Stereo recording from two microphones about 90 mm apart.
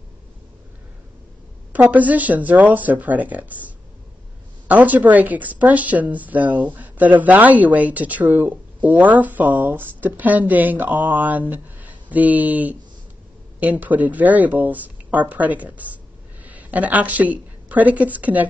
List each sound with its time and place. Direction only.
1.7 s speech: 15° right (ahead or behind)
4.6 s speech: 20° right (ahead or behind)